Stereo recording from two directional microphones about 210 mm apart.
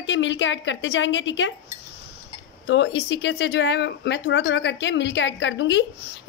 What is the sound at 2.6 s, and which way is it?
A woman's voice, 60° left (ahead or behind).